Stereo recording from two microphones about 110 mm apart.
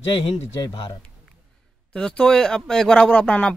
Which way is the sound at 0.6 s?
40° left (ahead or behind).